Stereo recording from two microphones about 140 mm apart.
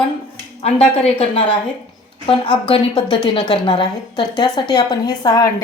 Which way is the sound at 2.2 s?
40° left (ahead or behind).